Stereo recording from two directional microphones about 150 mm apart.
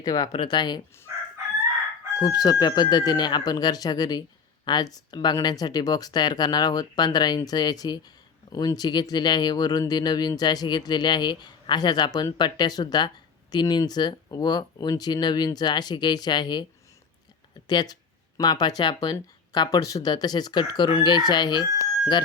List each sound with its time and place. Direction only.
0.0 s speech: 25° left (ahead or behind)
2.1 s speech: 25° left (ahead or behind)
17.7 s speech: 25° left (ahead or behind)